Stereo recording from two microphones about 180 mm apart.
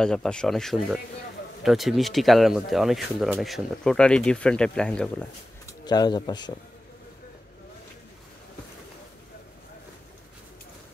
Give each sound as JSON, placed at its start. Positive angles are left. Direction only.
{"t": 0.0, "sound": "speech", "side_deg": 5}
{"t": 5.7, "sound": "speech", "side_deg": 20}